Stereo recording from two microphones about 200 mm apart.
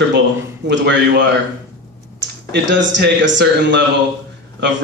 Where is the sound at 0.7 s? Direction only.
60° right (ahead or behind).